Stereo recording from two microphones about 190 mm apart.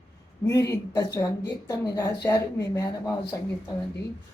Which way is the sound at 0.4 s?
15° left (ahead or behind).